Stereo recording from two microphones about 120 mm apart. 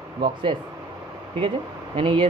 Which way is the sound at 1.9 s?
45° right (ahead or behind).